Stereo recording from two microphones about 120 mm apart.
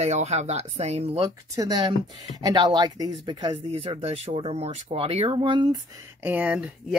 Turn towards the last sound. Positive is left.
turn(degrees=-10)  # may be behind; listen again after turning